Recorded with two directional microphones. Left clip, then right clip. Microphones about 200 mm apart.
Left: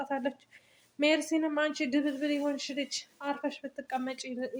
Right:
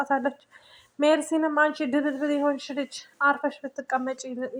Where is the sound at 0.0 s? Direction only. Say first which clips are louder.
Right 8 dB; 5° right (ahead or behind).